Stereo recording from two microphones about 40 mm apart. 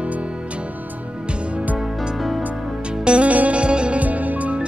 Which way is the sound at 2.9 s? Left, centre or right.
Right.